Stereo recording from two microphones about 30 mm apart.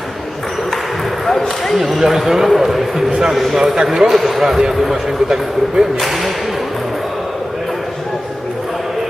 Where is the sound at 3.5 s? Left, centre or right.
Centre.